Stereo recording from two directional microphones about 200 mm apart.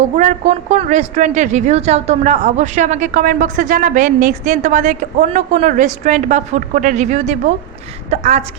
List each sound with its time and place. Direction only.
0.2 s a woman's voice: 40° right (ahead or behind)